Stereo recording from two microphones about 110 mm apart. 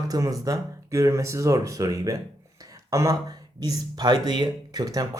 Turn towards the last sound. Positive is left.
turn(degrees=-35)  # may be behind; listen again after turning